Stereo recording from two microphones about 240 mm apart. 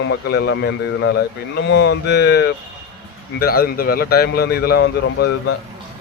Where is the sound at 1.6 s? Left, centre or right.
Left.